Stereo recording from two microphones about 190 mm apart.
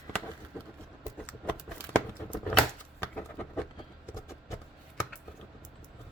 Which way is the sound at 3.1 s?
5° left (ahead or behind).